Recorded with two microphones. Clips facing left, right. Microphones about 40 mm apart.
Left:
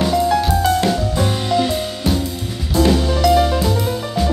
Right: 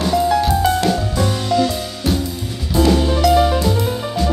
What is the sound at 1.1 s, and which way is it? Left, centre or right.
Music, left.